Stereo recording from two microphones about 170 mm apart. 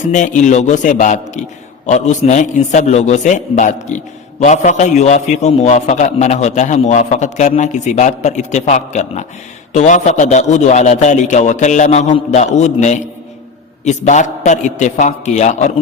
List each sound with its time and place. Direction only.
0.1 s a man's voice: 45° left (ahead or behind)